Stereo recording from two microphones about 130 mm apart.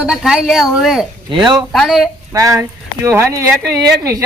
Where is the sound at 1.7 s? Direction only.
Centre (ahead or behind).